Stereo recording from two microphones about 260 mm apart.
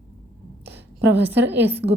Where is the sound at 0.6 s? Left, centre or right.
Right.